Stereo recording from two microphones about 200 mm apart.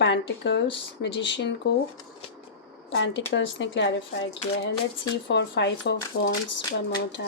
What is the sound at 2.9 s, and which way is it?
Speech, 65° left (ahead or behind).